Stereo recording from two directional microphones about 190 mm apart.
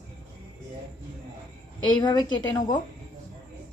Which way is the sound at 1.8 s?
25° left (ahead or behind).